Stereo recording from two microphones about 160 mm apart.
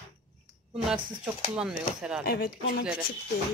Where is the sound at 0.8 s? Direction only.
5° right (ahead or behind).